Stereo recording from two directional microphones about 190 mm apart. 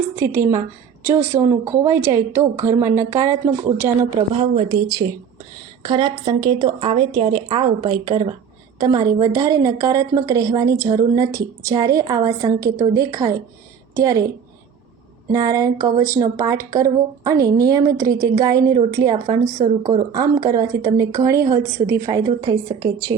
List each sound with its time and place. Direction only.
0.2 s a woman's voice: 15° right (ahead or behind)
15.3 s a woman's voice: 20° right (ahead or behind)